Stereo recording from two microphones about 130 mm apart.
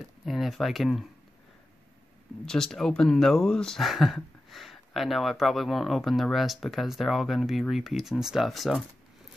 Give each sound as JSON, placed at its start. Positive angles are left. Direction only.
{"t": 0.2, "sound": "speech", "side_deg": 0}
{"t": 2.4, "sound": "speech", "side_deg": 5}